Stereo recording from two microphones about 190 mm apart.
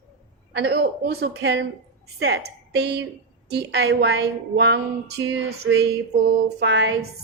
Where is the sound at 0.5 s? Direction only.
60° right (ahead or behind).